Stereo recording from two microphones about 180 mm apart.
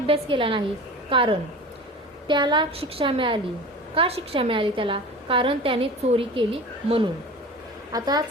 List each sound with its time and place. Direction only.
0.1 s a woman's voice: 30° right (ahead or behind)